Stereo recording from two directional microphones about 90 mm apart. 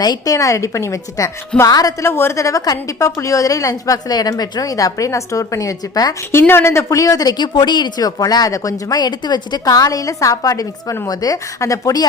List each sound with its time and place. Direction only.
0.0 s a woman's voice: 45° left (ahead or behind)
6.5 s speech: 30° left (ahead or behind)